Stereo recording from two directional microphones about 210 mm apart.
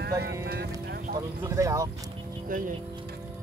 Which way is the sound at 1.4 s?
15° right (ahead or behind).